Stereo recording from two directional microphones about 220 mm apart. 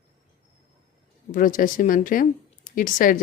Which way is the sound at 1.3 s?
40° left (ahead or behind).